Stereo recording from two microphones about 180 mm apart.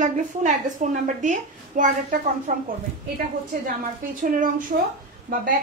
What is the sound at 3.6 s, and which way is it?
A woman's voice, 50° right (ahead or behind).